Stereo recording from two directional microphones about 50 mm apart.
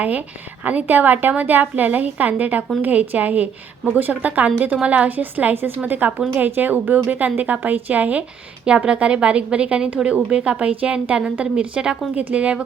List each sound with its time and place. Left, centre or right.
0.6 s a woman's voice: right
8.6 s a woman's voice: centre